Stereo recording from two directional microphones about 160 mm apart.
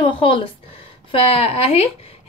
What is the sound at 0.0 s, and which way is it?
A woman's voice, 30° left (ahead or behind).